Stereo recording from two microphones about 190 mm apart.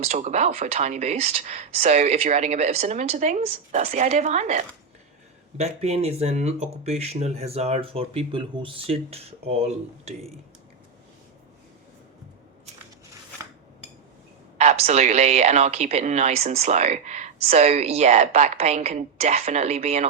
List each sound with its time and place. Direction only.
0.0 s a woman's voice: 35° right (ahead or behind)
14.6 s a woman's voice: 35° right (ahead or behind)